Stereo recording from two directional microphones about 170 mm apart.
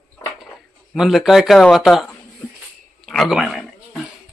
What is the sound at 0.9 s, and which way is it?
Speech, centre (ahead or behind).